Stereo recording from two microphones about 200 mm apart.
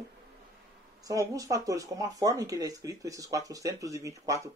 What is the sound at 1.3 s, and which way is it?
Speech, 15° right (ahead or behind).